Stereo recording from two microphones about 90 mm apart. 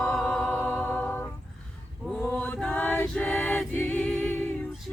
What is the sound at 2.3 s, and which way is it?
Choir, 20° left (ahead or behind).